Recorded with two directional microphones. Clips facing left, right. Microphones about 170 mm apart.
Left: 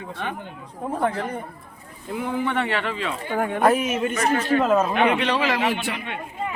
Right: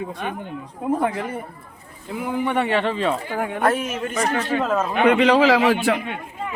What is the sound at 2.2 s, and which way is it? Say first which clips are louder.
Speech: right 3 dB; 15° right (ahead or behind).